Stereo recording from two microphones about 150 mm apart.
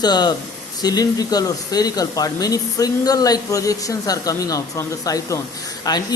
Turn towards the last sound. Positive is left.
turn(degrees=25)  # may be behind; listen again after turning